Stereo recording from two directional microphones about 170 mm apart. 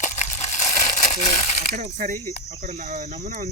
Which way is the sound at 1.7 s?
50° right (ahead or behind).